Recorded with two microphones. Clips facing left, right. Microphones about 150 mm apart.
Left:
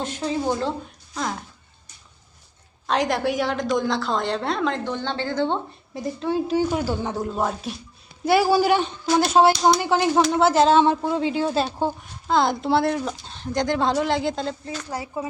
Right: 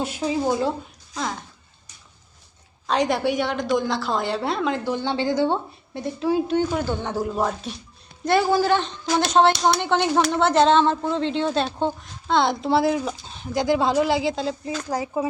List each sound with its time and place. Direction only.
0.0 s speech: 10° right (ahead or behind)
1.1 s speech: centre (ahead or behind)
2.8 s a woman's voice: centre (ahead or behind)
5.9 s a woman's voice: centre (ahead or behind)
6.6 s a woman's voice: 10° left (ahead or behind)
14.6 s speech: 15° right (ahead or behind)